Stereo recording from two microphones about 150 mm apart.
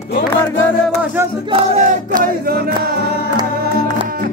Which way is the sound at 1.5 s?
50° right (ahead or behind).